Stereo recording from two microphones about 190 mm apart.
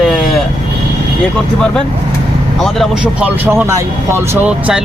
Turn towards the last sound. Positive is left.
turn(degrees=-10)  # may be behind; listen again after turning